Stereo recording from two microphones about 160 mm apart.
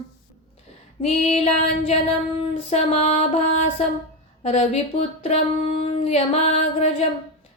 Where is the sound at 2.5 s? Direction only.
40° left (ahead or behind).